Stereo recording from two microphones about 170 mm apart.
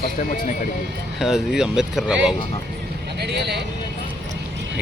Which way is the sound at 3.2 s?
80° right.